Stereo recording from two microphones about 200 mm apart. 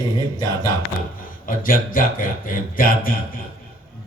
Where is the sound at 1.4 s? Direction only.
45° left (ahead or behind).